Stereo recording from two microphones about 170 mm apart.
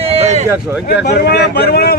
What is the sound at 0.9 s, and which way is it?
Speech, 75° left (ahead or behind).